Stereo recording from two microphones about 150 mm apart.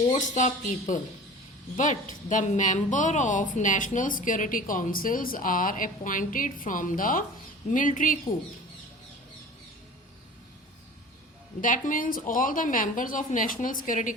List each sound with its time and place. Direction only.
0.1 s speech: 55° left (ahead or behind)
11.6 s speech: 60° left (ahead or behind)